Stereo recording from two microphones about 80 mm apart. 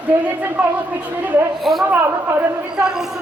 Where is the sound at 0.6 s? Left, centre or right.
Centre.